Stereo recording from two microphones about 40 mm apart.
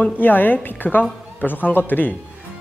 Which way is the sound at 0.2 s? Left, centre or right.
Left.